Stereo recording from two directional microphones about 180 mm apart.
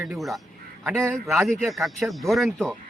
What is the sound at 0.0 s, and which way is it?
Speech, centre (ahead or behind).